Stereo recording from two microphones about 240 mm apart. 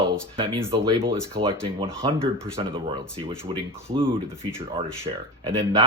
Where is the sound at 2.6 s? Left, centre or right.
Right.